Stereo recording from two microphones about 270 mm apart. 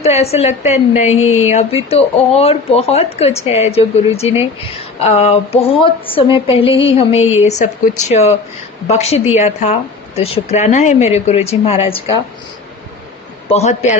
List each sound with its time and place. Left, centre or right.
0.0 s speech: left
1.1 s speech: left
1.5 s speech: left
13.5 s speech: left